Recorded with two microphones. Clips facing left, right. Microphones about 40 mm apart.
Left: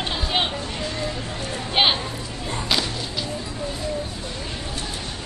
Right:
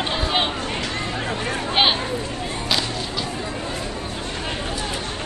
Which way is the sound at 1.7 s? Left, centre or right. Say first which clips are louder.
Right 1 dB; centre.